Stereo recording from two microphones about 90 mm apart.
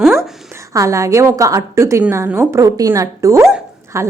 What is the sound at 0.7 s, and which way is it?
A woman's voice, 35° right (ahead or behind).